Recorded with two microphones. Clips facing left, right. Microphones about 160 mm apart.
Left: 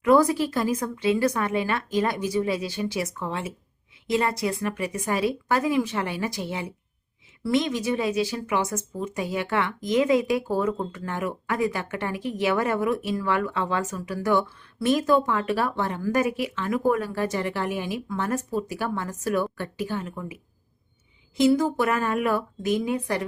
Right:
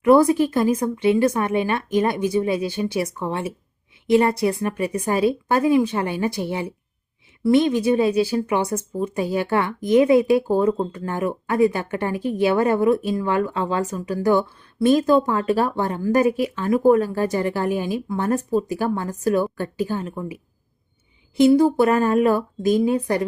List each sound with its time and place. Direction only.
0.0 s a woman's voice: 30° right (ahead or behind)